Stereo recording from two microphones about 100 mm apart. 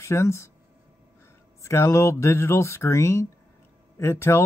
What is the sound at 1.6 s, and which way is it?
Speech, 25° left (ahead or behind).